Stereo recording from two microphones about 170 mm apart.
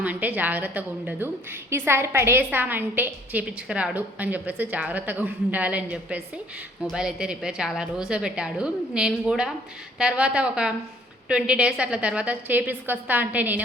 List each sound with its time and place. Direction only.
0.0 s a woman's voice: 10° right (ahead or behind)